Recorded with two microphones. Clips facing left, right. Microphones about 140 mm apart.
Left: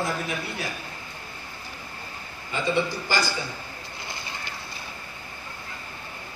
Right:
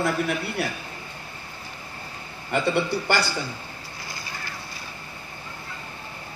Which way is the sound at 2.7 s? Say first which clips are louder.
Right 2 dB; 65° right (ahead or behind).